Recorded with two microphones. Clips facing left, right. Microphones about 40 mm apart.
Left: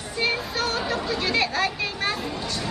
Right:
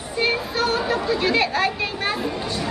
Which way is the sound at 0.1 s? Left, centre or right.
Centre.